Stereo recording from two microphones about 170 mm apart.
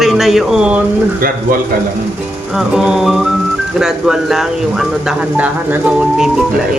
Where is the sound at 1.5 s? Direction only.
55° right (ahead or behind).